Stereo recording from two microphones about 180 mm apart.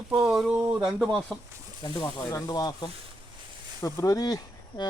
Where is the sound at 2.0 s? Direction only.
20° left (ahead or behind).